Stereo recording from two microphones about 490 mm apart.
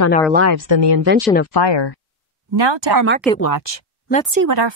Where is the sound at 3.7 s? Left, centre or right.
Left.